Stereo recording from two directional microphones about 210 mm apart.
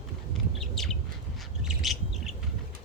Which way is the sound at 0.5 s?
Centre (ahead or behind).